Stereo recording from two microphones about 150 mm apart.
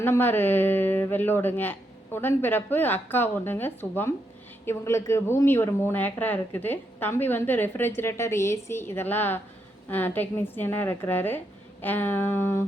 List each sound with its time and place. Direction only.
0.0 s speech: 15° left (ahead or behind)